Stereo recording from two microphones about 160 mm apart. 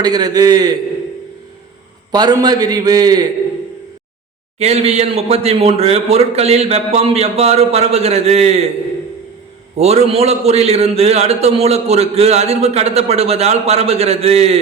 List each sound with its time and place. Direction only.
0.0 s a man's voice: 25° right (ahead or behind)
2.1 s a man's voice: 25° right (ahead or behind)
4.6 s a man's voice: 40° right (ahead or behind)
9.7 s a man's voice: 40° right (ahead or behind)